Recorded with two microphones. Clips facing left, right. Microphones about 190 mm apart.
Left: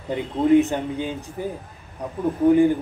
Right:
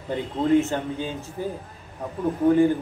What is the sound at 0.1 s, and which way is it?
A man's voice, 15° left (ahead or behind).